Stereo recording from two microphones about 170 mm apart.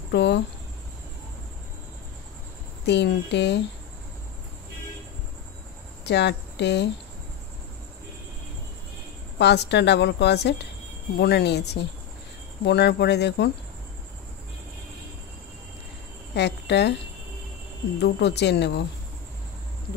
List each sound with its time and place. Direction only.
0.1 s a sound: 85° left
2.9 s a woman's voice: 85° left
6.0 s a woman's voice: 85° left
9.4 s a woman's voice: 80° left
16.3 s speech: 85° left
18.0 s a woman's voice: 80° left